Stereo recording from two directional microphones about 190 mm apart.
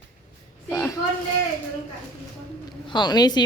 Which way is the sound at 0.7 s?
15° left (ahead or behind).